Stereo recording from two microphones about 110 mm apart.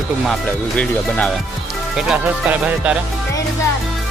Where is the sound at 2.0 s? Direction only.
10° right (ahead or behind).